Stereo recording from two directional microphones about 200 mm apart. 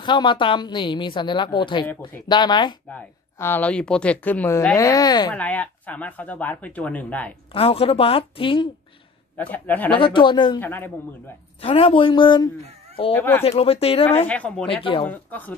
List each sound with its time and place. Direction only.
0.0 s a woman's voice: 25° left (ahead or behind)
2.9 s speech: 10° left (ahead or behind)
5.3 s speech: 5° left (ahead or behind)
7.5 s a woman's voice: 30° left (ahead or behind)
9.4 s speech: 10° left (ahead or behind)
9.9 s a woman's voice: 25° left (ahead or behind)
10.6 s speech: 10° left (ahead or behind)
11.6 s a woman's voice: 30° left (ahead or behind)
13.1 s speech: 10° left (ahead or behind)
13.4 s a woman's voice: 30° left (ahead or behind)
14.2 s speech: 5° left (ahead or behind)
14.7 s a woman's voice: 25° left (ahead or behind)
15.0 s speech: 10° left (ahead or behind)